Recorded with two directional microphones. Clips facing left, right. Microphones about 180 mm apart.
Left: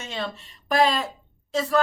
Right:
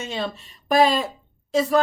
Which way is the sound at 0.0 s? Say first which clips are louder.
Right 3 dB; 20° right (ahead or behind).